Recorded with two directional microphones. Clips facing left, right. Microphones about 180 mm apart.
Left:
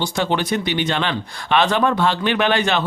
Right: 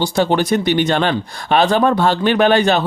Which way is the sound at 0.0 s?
40° right (ahead or behind).